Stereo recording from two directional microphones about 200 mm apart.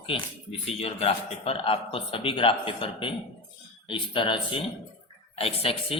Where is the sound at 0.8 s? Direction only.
30° left (ahead or behind).